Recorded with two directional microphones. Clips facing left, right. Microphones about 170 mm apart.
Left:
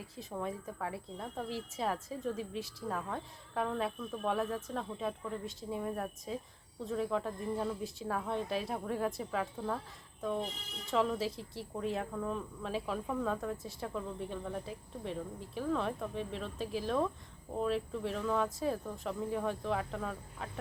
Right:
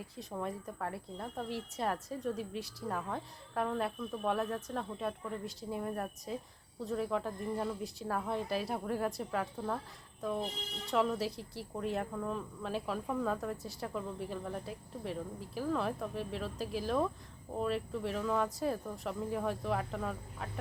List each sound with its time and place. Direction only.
0.0 s speech: centre (ahead or behind)